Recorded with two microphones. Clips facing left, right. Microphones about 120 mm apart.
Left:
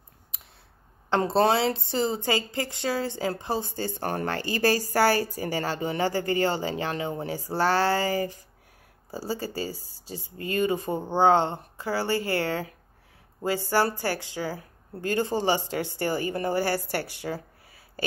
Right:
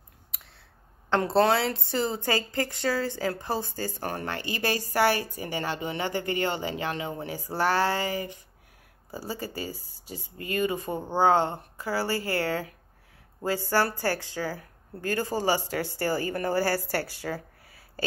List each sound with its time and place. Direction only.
1.1 s a woman's voice: 20° left (ahead or behind)